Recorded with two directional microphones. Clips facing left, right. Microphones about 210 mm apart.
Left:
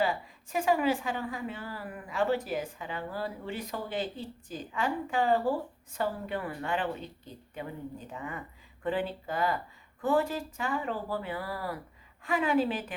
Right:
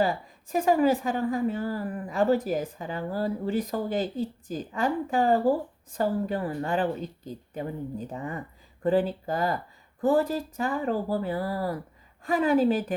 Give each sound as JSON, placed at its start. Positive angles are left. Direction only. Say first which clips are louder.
{"t": 0.0, "sound": "a woman's voice", "louder": "right 4 dB", "side_deg": -40}